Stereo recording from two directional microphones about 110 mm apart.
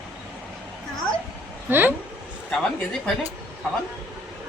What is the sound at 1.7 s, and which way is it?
Speech, 15° right (ahead or behind).